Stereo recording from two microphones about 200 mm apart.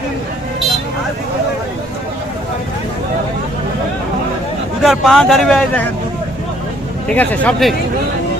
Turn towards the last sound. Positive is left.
turn(degrees=5)  # may be behind; listen again after turning